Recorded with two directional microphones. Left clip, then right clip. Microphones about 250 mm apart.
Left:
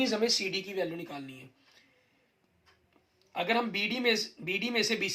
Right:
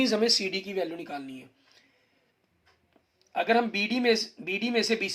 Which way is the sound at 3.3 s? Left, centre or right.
Right.